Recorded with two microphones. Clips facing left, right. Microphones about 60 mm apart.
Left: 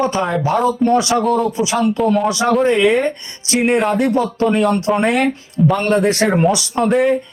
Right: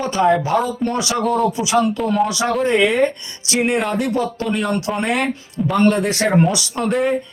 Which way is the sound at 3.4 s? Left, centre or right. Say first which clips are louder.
Left 4 dB; left.